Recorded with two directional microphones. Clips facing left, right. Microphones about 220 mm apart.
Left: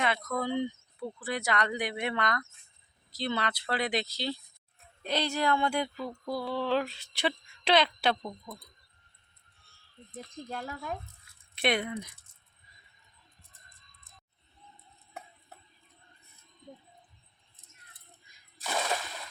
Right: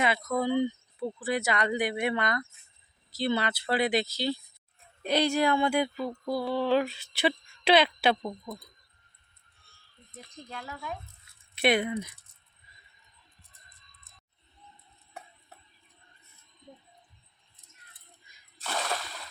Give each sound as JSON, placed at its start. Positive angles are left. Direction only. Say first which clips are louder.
{"t": 0.0, "sound": "speech", "louder": "right 3 dB", "side_deg": -5}
{"t": 10.1, "sound": "speech", "louder": "left 4 dB", "side_deg": 45}
{"t": 11.5, "sound": "speech", "louder": "right 4 dB", "side_deg": -5}
{"t": 18.6, "sound": "splash", "louder": "left 1 dB", "side_deg": 10}